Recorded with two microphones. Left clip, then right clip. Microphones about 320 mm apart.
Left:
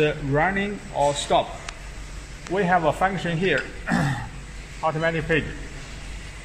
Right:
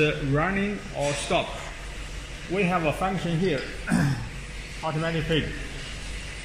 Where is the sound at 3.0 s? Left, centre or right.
Left.